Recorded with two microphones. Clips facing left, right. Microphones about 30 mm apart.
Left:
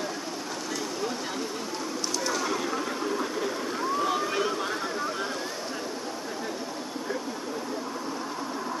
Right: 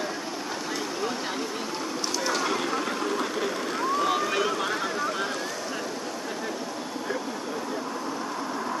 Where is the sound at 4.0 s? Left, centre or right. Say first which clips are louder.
Right 2 dB; right.